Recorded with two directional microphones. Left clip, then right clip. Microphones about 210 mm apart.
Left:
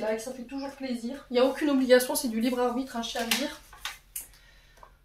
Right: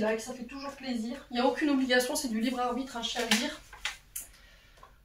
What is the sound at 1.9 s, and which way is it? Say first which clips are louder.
Speech: left 9 dB; 45° left (ahead or behind).